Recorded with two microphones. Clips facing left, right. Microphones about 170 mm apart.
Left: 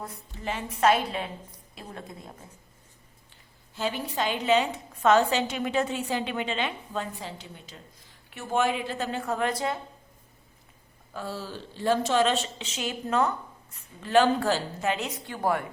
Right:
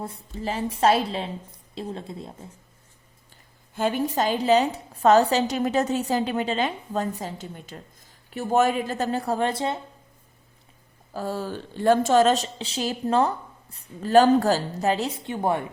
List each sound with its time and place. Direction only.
0.0 s a woman's voice: 30° right (ahead or behind)
3.8 s a woman's voice: 50° right (ahead or behind); by 9.8 s 25° right (ahead or behind)
11.1 s a woman's voice: 45° right (ahead or behind); by 15.6 s 25° right (ahead or behind)